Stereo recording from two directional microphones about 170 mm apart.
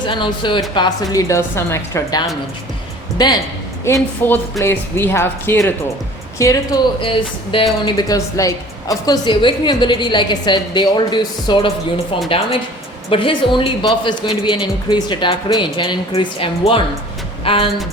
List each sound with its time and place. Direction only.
0.0 s a woman's voice: 30° left (ahead or behind)
3.8 s speech: 15° left (ahead or behind)
7.0 s a woman's voice: 30° left (ahead or behind)
13.1 s a woman's voice: 30° left (ahead or behind)